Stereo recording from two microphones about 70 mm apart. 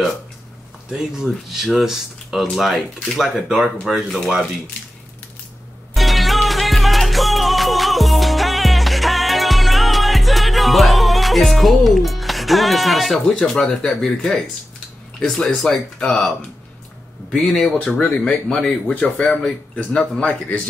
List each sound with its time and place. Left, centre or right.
0.8 s speech: centre
5.9 s music: centre
13.4 s speech: centre